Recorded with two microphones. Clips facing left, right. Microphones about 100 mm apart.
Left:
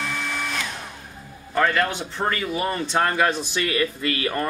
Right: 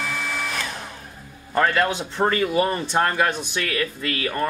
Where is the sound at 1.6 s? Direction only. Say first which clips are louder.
Right 1 dB; 10° right (ahead or behind).